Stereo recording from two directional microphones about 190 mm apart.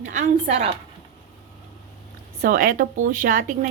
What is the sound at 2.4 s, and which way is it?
Speech, 50° right (ahead or behind).